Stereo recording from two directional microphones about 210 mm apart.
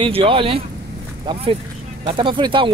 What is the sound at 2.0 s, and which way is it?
Speech, 25° right (ahead or behind).